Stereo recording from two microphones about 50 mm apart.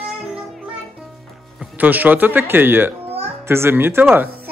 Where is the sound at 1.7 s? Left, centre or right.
Right.